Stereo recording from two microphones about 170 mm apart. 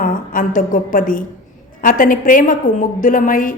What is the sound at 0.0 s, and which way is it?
A woman's voice, 55° left (ahead or behind).